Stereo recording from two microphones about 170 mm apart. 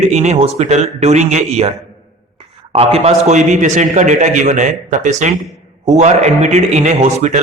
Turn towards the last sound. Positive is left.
turn(degrees=-40)  # may be behind; listen again after turning